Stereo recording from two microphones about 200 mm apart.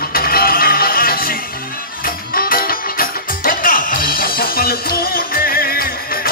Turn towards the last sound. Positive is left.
turn(degrees=45)  # may be behind; listen again after turning